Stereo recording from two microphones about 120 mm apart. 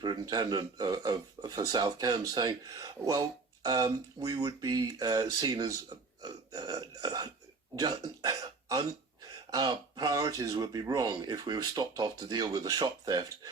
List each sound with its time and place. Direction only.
0.0 s speech: 35° right (ahead or behind)